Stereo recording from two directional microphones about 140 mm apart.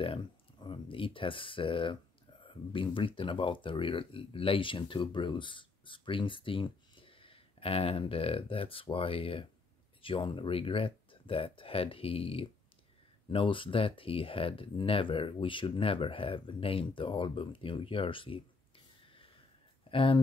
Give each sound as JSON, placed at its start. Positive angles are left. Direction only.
{"t": 0.0, "sound": "a sound", "side_deg": 35}
{"t": 2.4, "sound": "speech", "side_deg": 40}
{"t": 19.9, "sound": "speech", "side_deg": 40}